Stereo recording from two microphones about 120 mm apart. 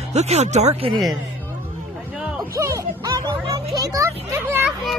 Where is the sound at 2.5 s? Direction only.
25° right (ahead or behind).